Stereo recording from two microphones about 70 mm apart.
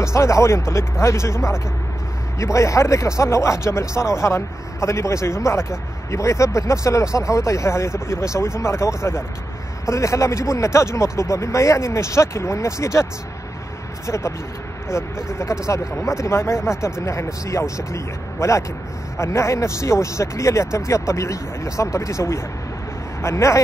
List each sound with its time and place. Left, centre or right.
0.0 s speech: left
14.0 s speech: left